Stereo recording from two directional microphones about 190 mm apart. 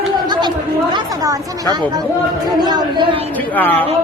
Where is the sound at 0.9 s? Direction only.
20° right (ahead or behind).